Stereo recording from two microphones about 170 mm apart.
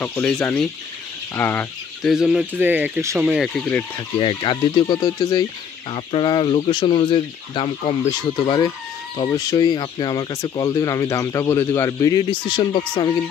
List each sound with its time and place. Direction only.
0.0 s speech: 5° left (ahead or behind)
2.0 s speech: 5° right (ahead or behind)
4.2 s speech: 30° left (ahead or behind)